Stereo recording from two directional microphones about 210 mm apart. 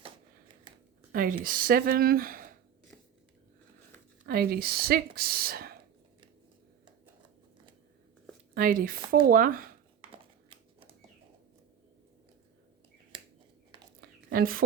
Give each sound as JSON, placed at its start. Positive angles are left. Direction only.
{"t": 1.1, "sound": "speech", "side_deg": -40}
{"t": 4.3, "sound": "speech", "side_deg": -45}
{"t": 8.5, "sound": "speech", "side_deg": -45}
{"t": 14.0, "sound": "a sound", "side_deg": -45}